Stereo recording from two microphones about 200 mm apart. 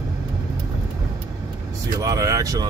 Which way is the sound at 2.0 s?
15° right (ahead or behind).